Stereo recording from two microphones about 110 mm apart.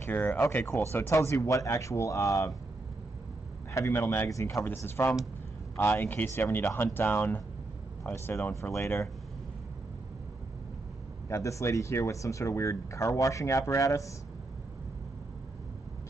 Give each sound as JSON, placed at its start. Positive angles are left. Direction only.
{"t": 0.0, "sound": "speech", "side_deg": 15}
{"t": 3.7, "sound": "speech", "side_deg": 25}
{"t": 11.2, "sound": "speech", "side_deg": 30}